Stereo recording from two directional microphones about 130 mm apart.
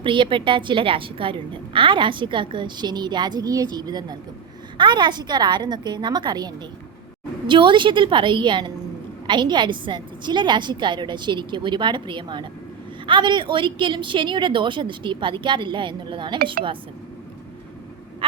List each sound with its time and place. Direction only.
0.0 s a woman's voice: 40° right (ahead or behind)
18.2 s frog: 45° right (ahead or behind)